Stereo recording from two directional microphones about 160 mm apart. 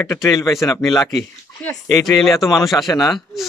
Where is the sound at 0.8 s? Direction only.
Centre (ahead or behind).